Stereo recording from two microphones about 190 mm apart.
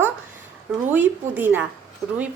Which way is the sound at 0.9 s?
10° right (ahead or behind).